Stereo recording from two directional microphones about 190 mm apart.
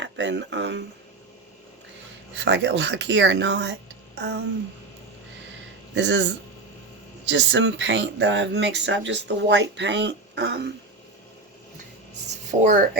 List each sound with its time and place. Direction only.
0.0 s speech: 70° right (ahead or behind)
2.4 s speech: 70° right (ahead or behind)
4.2 s a sound: 65° right (ahead or behind)
5.9 s speech: 65° right (ahead or behind)
12.3 s speech: 40° right (ahead or behind)